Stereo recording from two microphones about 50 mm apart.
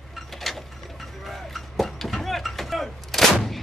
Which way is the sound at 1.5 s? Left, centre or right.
Centre.